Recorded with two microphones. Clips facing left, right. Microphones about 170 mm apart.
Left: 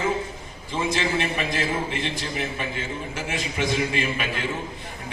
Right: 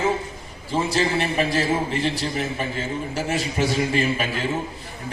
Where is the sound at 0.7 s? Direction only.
35° right (ahead or behind).